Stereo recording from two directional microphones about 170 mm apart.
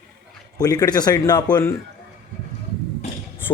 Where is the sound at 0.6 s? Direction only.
20° left (ahead or behind).